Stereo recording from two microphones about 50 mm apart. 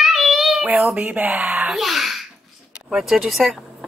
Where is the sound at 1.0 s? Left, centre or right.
Right.